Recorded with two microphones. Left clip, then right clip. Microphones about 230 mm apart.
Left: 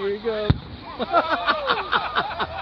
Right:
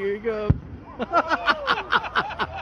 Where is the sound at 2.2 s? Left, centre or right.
Centre.